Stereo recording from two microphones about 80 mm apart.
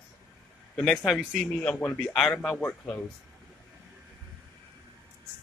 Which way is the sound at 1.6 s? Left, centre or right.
Left.